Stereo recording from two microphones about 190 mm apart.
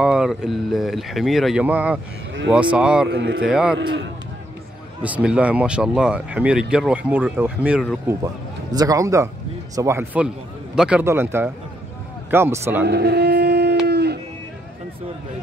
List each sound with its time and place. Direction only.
0.0 s speech: 5° right (ahead or behind)
3.1 s speech: 65° right (ahead or behind)
3.4 s speech: 5° right (ahead or behind)
5.0 s speech: 5° right (ahead or behind)
8.7 s speech: 20° right (ahead or behind)
12.8 s a sound: 60° right (ahead or behind)